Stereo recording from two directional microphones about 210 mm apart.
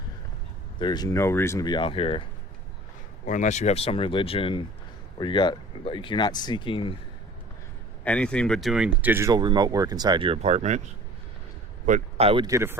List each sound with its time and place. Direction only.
0.8 s speech: 20° left (ahead or behind)
3.2 s speech: 35° left (ahead or behind)
8.0 s speech: 5° left (ahead or behind); by 12.5 s 25° right (ahead or behind)
12.5 s speech: 15° right (ahead or behind)